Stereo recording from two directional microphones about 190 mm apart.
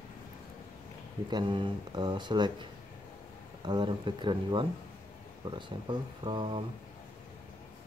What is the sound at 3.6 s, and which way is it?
Speech, 25° right (ahead or behind).